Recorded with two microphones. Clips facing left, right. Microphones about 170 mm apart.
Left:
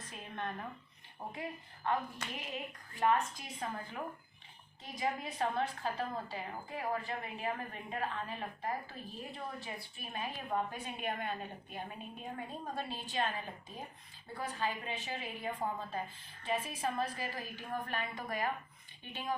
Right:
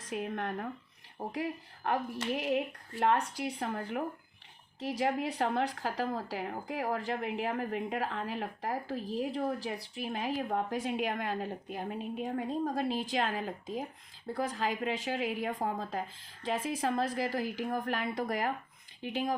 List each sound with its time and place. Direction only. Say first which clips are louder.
0.1 s a woman's voice: right 8 dB; 75° right (ahead or behind)